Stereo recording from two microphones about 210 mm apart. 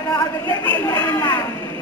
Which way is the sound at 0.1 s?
15° left (ahead or behind).